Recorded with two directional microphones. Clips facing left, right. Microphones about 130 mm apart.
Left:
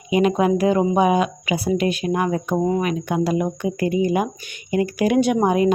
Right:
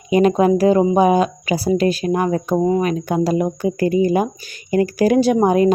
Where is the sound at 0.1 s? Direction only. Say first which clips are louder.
Right 4 dB; 40° right (ahead or behind).